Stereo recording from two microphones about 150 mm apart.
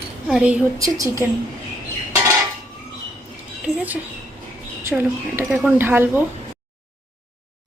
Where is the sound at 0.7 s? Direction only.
20° right (ahead or behind).